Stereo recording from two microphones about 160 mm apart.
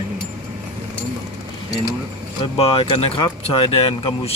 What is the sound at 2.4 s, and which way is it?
Speech, 35° left (ahead or behind).